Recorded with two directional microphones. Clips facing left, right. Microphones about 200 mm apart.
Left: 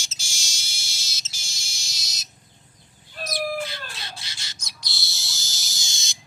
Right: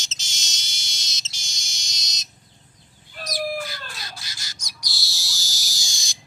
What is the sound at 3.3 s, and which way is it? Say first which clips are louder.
Bird: even; 25° left (ahead or behind).